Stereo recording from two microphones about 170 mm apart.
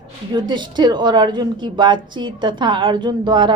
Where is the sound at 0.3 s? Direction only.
25° right (ahead or behind).